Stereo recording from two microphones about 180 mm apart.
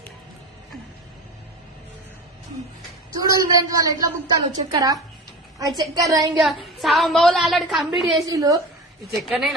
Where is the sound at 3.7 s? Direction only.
20° right (ahead or behind).